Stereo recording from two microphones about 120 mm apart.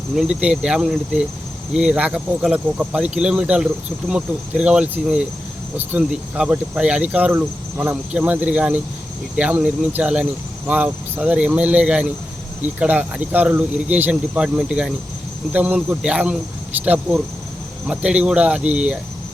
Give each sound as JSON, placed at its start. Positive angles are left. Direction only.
{"t": 0.2, "sound": "speech", "side_deg": -10}